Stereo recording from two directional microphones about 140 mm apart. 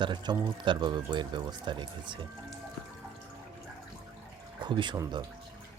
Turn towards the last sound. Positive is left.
turn(degrees=-35)  # may be behind; listen again after turning